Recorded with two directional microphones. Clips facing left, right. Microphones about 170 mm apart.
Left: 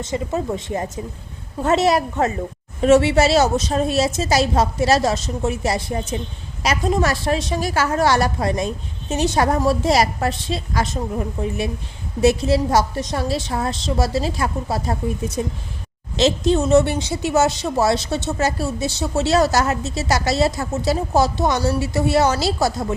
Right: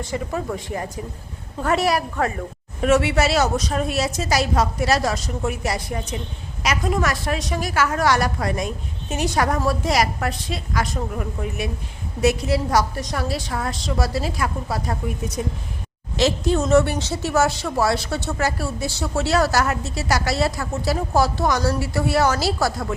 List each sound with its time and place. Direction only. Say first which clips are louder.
0.0 s speech: left 3 dB; 20° left (ahead or behind)